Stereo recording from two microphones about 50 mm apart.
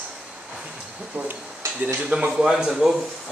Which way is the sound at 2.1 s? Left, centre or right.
Centre.